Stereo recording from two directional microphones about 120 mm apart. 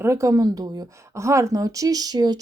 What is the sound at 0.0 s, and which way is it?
Speech, 25° right (ahead or behind).